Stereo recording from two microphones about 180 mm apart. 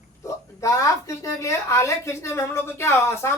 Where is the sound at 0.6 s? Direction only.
15° left (ahead or behind).